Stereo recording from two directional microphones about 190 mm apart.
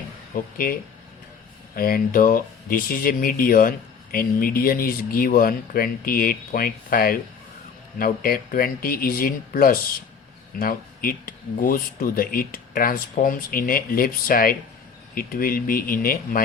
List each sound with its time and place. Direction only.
0.5 s speech: 50° left (ahead or behind)